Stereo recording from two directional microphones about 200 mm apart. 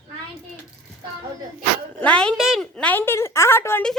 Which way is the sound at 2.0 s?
5° left (ahead or behind).